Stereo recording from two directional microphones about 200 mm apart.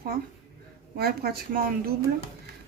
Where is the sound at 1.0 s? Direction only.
50° right (ahead or behind).